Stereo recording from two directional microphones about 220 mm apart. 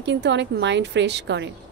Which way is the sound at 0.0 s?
55° right (ahead or behind).